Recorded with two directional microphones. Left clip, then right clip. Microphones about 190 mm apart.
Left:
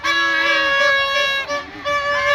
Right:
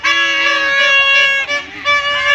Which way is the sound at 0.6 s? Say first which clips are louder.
Right 3 dB; 35° right (ahead or behind).